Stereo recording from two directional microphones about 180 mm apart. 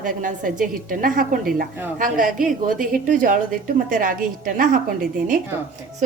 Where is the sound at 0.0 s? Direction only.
45° right (ahead or behind).